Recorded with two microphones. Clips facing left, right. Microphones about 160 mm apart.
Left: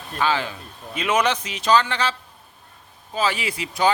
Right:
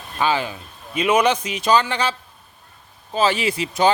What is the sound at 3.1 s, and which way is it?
Speech, 25° right (ahead or behind).